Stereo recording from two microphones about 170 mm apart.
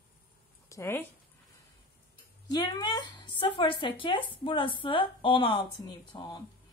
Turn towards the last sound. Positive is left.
turn(degrees=25)  # may be behind; listen again after turning